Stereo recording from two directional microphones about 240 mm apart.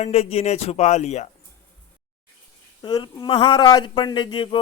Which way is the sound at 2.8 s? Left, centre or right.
Centre.